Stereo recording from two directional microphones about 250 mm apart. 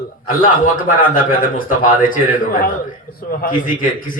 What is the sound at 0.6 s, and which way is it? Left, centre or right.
Speech, left.